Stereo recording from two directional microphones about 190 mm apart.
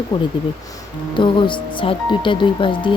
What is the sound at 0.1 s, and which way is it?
Speech, 20° left (ahead or behind).